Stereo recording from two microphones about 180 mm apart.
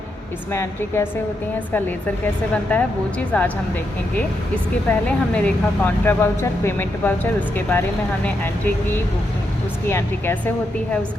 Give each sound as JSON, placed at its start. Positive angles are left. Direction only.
{"t": 0.5, "sound": "speech", "side_deg": 15}
{"t": 4.9, "sound": "speech", "side_deg": 5}